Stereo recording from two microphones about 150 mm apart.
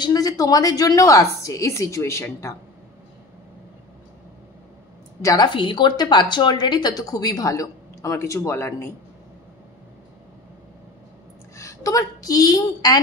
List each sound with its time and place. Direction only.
0.0 s speech: 25° left (ahead or behind)
5.2 s speech: 25° left (ahead or behind)
11.5 s a woman's voice: 20° left (ahead or behind)